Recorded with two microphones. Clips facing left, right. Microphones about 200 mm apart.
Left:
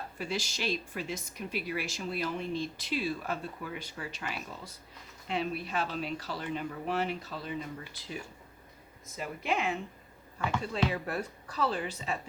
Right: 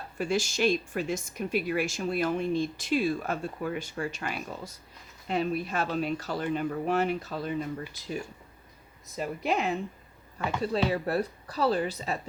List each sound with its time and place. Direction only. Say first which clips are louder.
0.2 s speech: right 9 dB; 50° right (ahead or behind)
9.1 s speech: right 4 dB; 40° right (ahead or behind)